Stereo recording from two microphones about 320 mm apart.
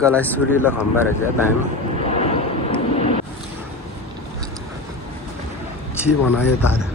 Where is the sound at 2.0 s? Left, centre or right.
Centre.